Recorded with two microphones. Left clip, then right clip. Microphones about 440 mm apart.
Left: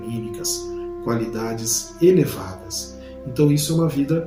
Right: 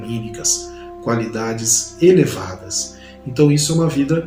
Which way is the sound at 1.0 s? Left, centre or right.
Left.